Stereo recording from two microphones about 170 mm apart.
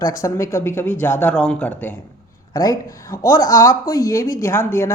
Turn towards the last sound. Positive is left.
turn(degrees=15)  # may be behind; listen again after turning